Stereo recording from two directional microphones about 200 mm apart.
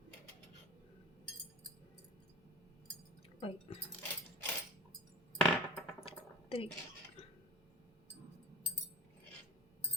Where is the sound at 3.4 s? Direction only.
25° left (ahead or behind).